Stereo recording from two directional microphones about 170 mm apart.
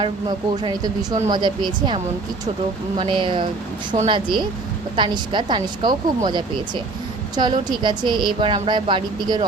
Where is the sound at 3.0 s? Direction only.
30° right (ahead or behind).